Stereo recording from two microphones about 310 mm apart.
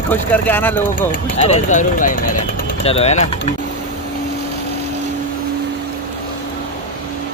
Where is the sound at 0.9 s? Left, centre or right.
Left.